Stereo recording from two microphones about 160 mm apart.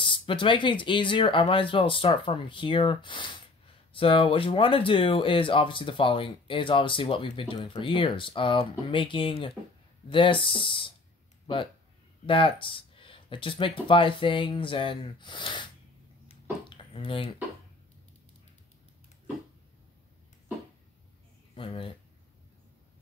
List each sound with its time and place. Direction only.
0.0 s speech: 30° left (ahead or behind)
16.3 s a sound: 35° left (ahead or behind)
21.5 s speech: 35° left (ahead or behind)